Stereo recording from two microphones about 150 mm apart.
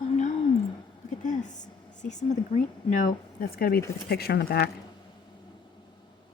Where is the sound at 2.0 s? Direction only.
55° left (ahead or behind); by 4.6 s 90° left.